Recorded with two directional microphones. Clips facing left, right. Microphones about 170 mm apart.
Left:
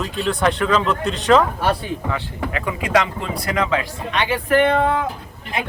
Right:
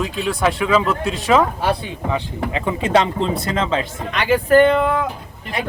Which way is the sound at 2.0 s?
20° right (ahead or behind).